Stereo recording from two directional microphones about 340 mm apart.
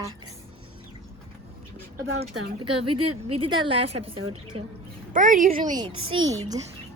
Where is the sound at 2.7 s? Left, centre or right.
Right.